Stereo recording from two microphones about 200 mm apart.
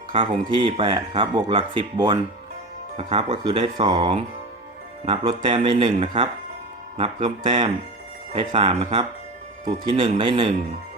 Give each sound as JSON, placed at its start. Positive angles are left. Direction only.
{"t": 0.1, "sound": "speech", "side_deg": -25}